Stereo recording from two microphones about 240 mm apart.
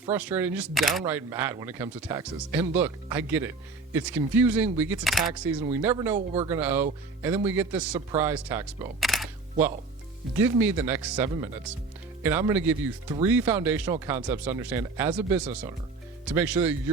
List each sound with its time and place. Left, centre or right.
0.1 s speech: centre
6.1 s speech: right
6.5 s speech: centre